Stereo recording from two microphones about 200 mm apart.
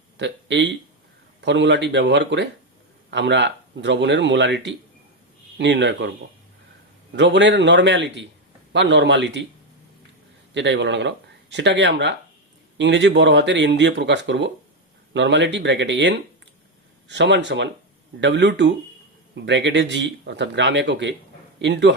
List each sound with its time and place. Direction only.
0.2 s speech: 60° right (ahead or behind)
7.2 s speech: 60° right (ahead or behind)
10.5 s speech: 60° right (ahead or behind)